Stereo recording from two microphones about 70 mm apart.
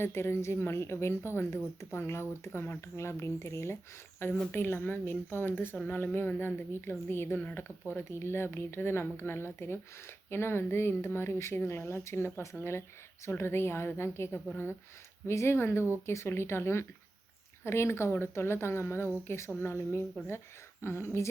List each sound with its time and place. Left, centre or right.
0.0 s speech: left
7.3 s speech: left
8.2 s speech: left